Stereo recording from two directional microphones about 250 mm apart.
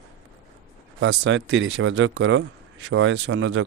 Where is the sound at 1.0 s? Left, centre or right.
Right.